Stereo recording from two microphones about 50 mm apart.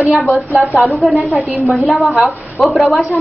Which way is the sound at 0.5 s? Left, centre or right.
Right.